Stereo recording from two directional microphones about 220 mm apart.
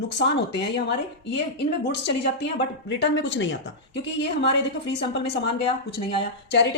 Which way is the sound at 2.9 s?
55° left (ahead or behind).